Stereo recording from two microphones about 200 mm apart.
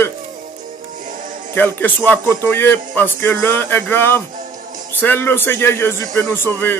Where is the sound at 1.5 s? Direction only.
10° left (ahead or behind).